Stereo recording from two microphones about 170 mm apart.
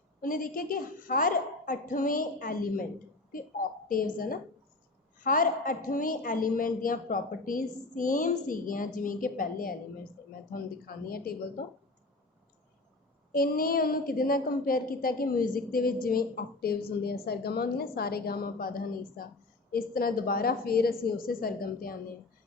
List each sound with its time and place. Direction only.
0.2 s a woman's voice: 55° left (ahead or behind)
3.8 s a woman's voice: 55° left (ahead or behind)
13.3 s a woman's voice: 60° left (ahead or behind)